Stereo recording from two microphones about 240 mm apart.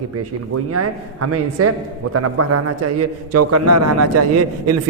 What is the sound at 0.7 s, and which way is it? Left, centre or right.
A man's voice, right.